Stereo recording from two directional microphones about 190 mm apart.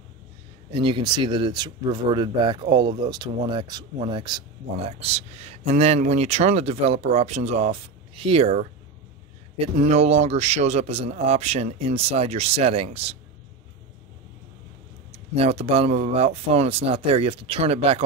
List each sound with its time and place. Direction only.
0.7 s speech: 30° right (ahead or behind)
9.8 s speech: 35° right (ahead or behind)
15.0 s speech: 30° right (ahead or behind)